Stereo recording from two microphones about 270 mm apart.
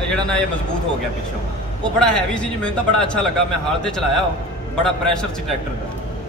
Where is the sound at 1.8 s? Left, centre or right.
Centre.